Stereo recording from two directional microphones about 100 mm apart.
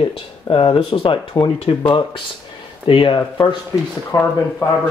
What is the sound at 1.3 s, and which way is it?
Speech, 50° left (ahead or behind).